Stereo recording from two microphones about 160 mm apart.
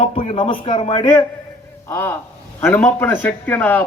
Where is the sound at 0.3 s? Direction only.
35° left (ahead or behind).